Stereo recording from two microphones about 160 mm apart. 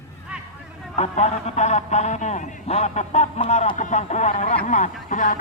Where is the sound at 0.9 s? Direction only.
45° left (ahead or behind).